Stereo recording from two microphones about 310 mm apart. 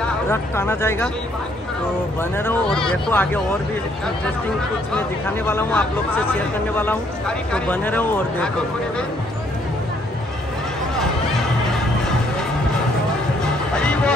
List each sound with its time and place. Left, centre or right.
0.0 s speech: centre
2.3 s speech: centre
4.9 s speech: centre
13.7 s music: centre